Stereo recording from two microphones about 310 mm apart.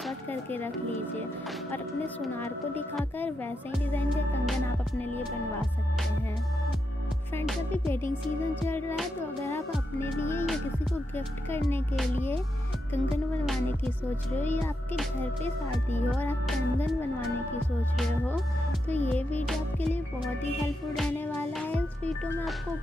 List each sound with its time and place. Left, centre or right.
0.0 s speech: centre
1.7 s speech: centre
5.0 s speech: centre
7.3 s speech: centre
14.3 s speech: centre